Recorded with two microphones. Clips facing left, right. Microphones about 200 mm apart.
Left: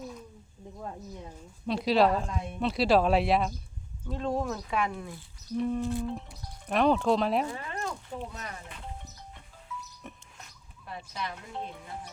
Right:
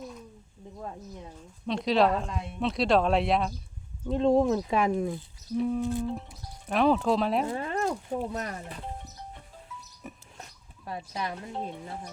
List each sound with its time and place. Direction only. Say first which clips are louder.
1.6 s speech: even; 5° left (ahead or behind)
4.1 s speech: right 8 dB; 25° right (ahead or behind)
4.8 s speech: right 6 dB; 40° right (ahead or behind)
5.5 s speech: right 2 dB; centre (ahead or behind)
7.6 s speech: right 7 dB; 40° right (ahead or behind)
10.0 s music: right 2 dB; 5° right (ahead or behind)
10.8 s speech: right 4 dB; 40° right (ahead or behind)